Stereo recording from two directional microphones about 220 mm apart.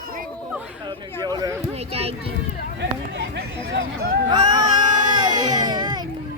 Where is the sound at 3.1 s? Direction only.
50° right (ahead or behind).